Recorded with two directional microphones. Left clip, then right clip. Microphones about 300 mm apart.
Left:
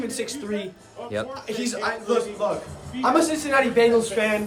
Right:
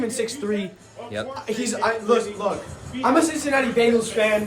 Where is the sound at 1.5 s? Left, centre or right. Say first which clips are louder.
Right 7 dB; centre.